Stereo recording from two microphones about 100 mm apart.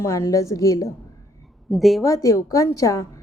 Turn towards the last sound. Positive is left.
turn(degrees=30)  # may be behind; listen again after turning